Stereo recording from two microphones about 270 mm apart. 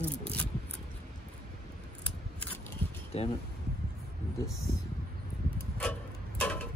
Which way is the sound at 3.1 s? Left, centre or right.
Left.